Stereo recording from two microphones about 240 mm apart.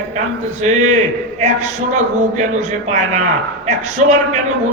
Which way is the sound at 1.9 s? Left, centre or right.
Right.